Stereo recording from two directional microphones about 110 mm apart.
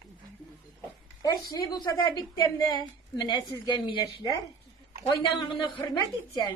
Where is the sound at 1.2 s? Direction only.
35° left (ahead or behind).